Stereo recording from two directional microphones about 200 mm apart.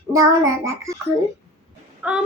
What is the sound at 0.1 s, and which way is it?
Speech, 15° right (ahead or behind).